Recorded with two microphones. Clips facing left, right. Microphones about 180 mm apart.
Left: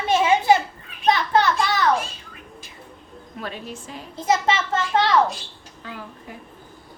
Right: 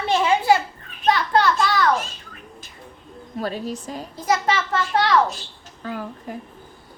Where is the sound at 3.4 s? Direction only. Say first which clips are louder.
Right 6 dB; 40° right (ahead or behind).